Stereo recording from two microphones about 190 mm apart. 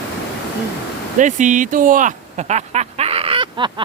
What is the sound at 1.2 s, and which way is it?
Speech, 40° right (ahead or behind).